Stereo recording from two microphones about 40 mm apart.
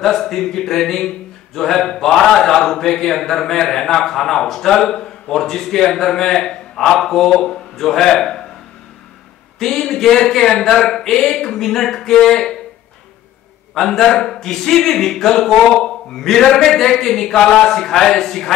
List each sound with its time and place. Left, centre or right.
0.0 s speech: centre
9.6 s speech: centre
13.7 s speech: centre